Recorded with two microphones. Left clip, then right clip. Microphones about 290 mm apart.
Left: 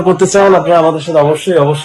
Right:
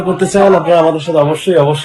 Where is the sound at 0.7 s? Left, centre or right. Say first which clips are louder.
Left 1 dB; centre.